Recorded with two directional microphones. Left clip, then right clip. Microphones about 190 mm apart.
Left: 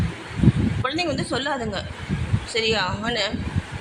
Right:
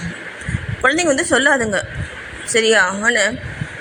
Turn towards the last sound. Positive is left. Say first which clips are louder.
# right 9 dB
turn(degrees=-20)  # may be behind; listen again after turning